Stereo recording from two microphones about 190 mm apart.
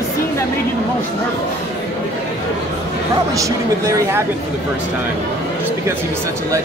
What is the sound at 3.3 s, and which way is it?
Speech, 15° right (ahead or behind).